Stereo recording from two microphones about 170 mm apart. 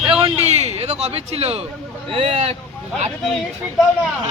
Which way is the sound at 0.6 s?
40° right (ahead or behind).